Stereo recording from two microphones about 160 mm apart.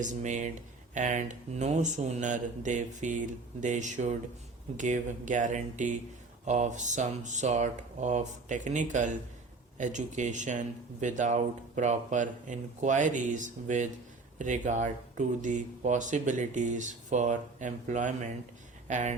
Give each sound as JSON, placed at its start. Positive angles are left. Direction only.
{"t": 0.0, "sound": "speech", "side_deg": -50}